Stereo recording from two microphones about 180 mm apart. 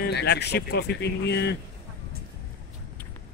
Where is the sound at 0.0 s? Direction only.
65° left (ahead or behind).